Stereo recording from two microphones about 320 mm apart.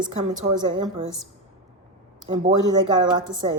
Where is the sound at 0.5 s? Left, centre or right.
Centre.